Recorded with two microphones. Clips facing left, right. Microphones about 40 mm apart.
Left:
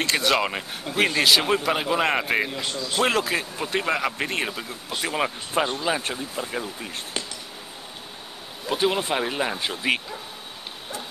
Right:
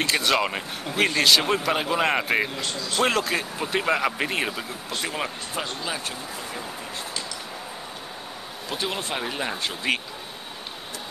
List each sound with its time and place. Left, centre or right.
0.0 s speech: centre
4.9 s speech: centre
6.0 s speech: left
8.6 s speech: centre